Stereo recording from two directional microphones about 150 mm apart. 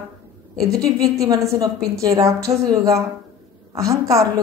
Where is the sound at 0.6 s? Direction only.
20° right (ahead or behind).